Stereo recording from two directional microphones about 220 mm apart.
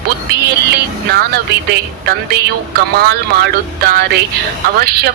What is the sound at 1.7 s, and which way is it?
A woman's voice, 45° right (ahead or behind).